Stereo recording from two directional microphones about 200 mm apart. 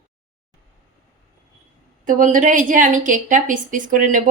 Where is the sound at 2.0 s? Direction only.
40° right (ahead or behind).